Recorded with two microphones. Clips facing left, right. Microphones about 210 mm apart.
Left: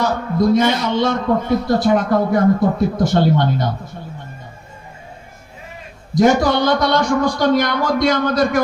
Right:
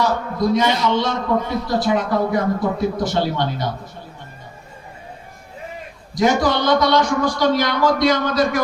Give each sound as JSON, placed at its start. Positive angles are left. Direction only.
{"t": 0.0, "sound": "a man's voice", "side_deg": 50}
{"t": 6.1, "sound": "a man's voice", "side_deg": 50}